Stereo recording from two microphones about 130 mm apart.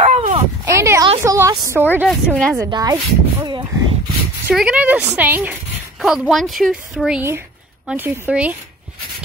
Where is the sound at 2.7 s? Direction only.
30° right (ahead or behind).